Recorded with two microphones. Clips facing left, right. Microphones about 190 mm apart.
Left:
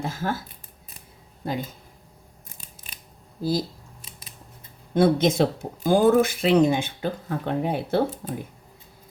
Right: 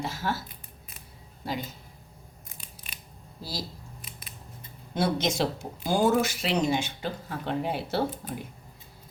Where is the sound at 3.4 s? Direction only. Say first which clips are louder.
Left 12 dB; 50° left (ahead or behind).